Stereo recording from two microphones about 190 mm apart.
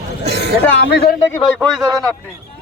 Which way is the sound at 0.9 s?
55° left (ahead or behind).